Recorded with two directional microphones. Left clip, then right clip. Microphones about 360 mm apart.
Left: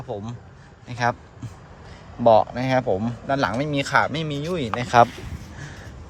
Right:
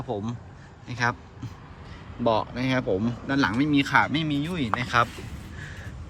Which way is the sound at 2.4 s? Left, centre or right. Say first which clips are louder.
Left 6 dB; left.